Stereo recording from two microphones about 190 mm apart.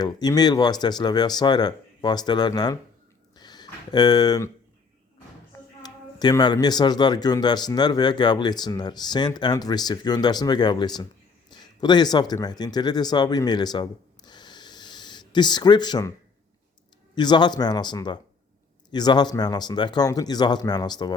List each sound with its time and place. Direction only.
0.0 s speech: 20° left (ahead or behind)
3.3 s a sound: 20° left (ahead or behind)
5.8 s speech: 20° left (ahead or behind)
17.2 s speech: 25° left (ahead or behind)